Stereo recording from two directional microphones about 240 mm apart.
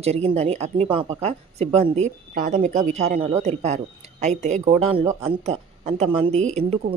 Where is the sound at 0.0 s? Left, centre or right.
Right.